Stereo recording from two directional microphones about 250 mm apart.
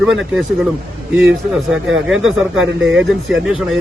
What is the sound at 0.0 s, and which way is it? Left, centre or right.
A man's voice, centre.